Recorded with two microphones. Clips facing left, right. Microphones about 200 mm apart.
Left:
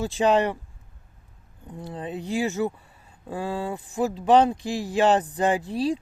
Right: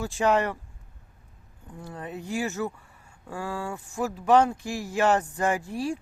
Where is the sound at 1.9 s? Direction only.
15° left (ahead or behind).